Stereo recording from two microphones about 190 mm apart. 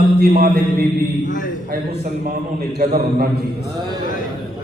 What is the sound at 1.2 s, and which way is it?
Speech, 45° left (ahead or behind).